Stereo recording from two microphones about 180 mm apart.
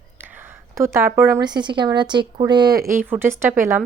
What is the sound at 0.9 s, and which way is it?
Speech, 15° right (ahead or behind).